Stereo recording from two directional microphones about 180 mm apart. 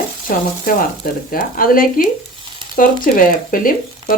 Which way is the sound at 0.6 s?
55° left (ahead or behind).